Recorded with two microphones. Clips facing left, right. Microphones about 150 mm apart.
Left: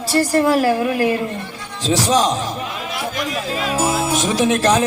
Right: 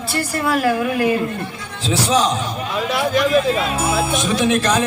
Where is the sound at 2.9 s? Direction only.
75° right (ahead or behind).